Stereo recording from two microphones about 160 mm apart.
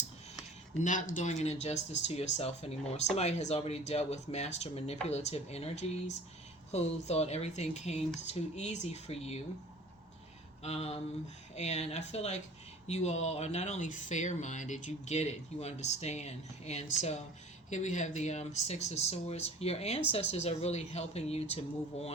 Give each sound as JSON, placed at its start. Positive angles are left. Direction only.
{"t": 0.8, "sound": "speech", "side_deg": 50}
{"t": 10.6, "sound": "speech", "side_deg": 40}